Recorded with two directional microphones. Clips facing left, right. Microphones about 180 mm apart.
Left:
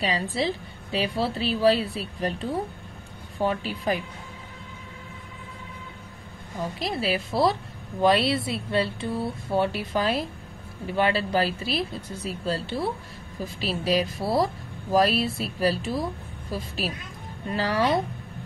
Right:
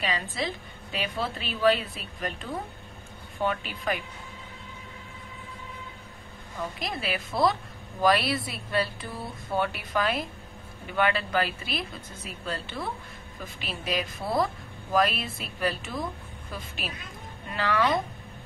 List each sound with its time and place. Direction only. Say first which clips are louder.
0.0 s a woman's voice: left 5 dB; 35° left (ahead or behind)
6.8 s a woman's voice: left 7 dB; 30° left (ahead or behind)